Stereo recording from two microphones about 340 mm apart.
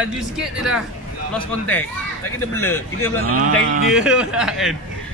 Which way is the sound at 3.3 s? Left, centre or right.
Right.